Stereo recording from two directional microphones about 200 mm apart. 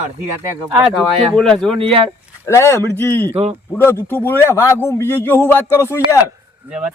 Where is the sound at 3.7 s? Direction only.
10° left (ahead or behind).